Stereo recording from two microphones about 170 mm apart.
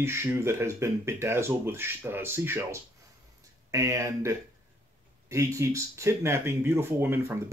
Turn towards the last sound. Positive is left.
turn(degrees=-10)  # may be behind; listen again after turning